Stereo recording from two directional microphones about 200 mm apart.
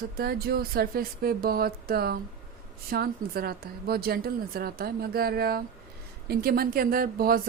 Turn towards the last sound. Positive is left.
turn(degrees=-45)  # may be behind; listen again after turning